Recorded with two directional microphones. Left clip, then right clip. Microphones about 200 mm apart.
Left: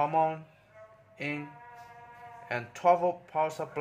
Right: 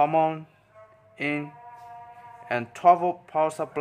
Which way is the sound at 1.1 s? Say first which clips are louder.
Right 7 dB; 25° right (ahead or behind).